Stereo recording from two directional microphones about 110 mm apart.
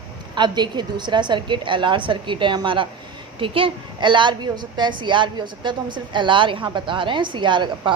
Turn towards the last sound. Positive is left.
turn(degrees=-45)  # may be behind; listen again after turning